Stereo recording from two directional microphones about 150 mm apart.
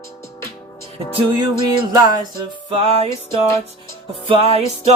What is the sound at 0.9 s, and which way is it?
Music, 30° right (ahead or behind).